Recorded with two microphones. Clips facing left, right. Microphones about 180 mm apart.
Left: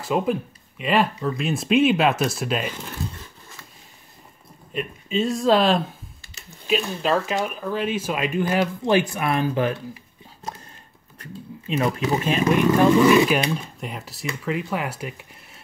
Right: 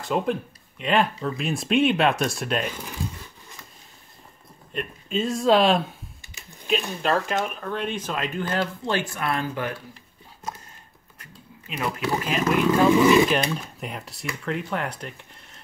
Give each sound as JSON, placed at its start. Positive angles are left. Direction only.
{"t": 0.0, "sound": "speech", "side_deg": 5}
{"t": 4.7, "sound": "speech", "side_deg": 0}
{"t": 11.1, "sound": "speech", "side_deg": 25}
{"t": 13.3, "sound": "speech", "side_deg": 0}